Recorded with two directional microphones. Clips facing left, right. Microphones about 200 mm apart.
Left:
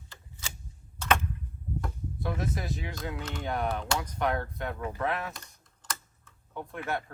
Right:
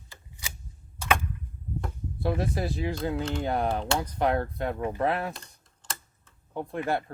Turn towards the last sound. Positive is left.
turn(degrees=-35)  # may be behind; listen again after turning